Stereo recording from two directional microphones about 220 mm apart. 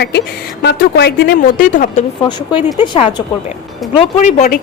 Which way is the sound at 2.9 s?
30° left (ahead or behind).